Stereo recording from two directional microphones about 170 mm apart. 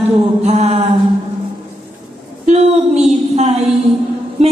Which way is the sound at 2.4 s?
40° right (ahead or behind).